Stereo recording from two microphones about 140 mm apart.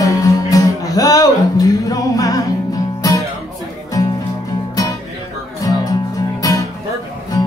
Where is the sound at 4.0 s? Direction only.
25° left (ahead or behind).